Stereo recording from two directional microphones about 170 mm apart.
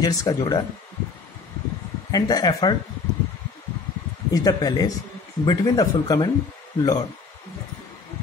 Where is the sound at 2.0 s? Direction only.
20° left (ahead or behind).